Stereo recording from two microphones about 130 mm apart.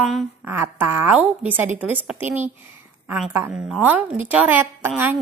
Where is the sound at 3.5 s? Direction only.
5° right (ahead or behind).